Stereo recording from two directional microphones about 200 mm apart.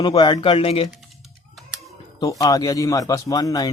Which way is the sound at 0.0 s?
20° left (ahead or behind).